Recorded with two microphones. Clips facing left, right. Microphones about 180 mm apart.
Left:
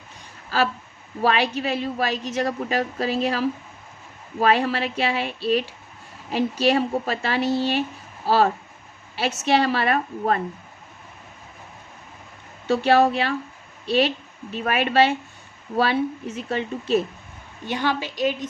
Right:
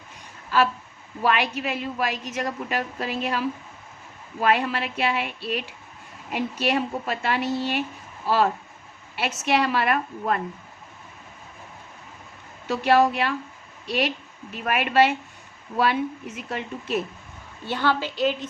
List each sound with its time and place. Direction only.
1.2 s speech: 30° left (ahead or behind)
12.6 s speech: 30° left (ahead or behind)
17.7 s a woman's voice: 15° left (ahead or behind)